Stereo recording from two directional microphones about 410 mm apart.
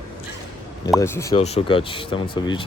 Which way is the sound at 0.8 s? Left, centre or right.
Centre.